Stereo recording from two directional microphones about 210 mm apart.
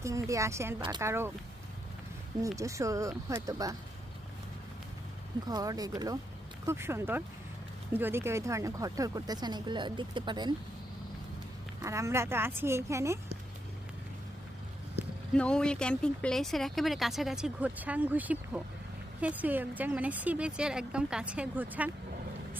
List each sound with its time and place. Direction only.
0.0 s speech: 15° right (ahead or behind)
2.6 s speech: 15° right (ahead or behind)
5.5 s speech: 15° right (ahead or behind)
11.8 s speech: 15° right (ahead or behind)
15.3 s speech: 5° left (ahead or behind)